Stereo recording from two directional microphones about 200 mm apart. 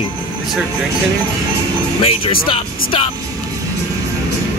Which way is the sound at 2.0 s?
30° left (ahead or behind).